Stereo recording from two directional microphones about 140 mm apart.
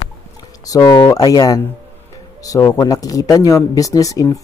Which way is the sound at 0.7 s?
25° left (ahead or behind).